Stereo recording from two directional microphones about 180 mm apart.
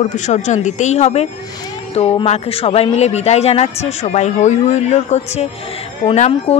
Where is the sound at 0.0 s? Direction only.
40° left (ahead or behind).